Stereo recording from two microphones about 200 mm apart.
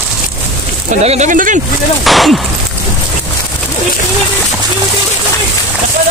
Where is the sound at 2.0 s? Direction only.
Centre (ahead or behind).